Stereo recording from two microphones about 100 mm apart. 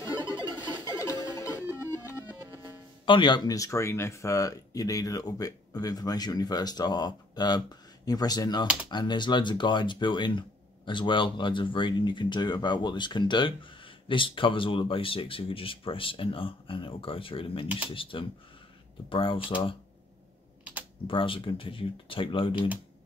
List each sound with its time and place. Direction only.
0.8 s music: 35° left (ahead or behind)
2.2 s music: 20° right (ahead or behind)
3.1 s speech: 50° left (ahead or behind)
21.1 s speech: 60° left (ahead or behind)